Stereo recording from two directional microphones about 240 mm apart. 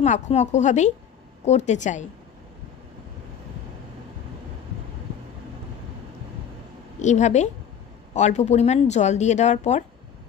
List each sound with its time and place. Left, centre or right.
0.0 s speech: left
7.0 s speech: left